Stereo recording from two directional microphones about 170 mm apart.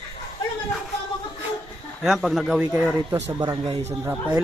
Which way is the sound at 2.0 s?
Centre (ahead or behind).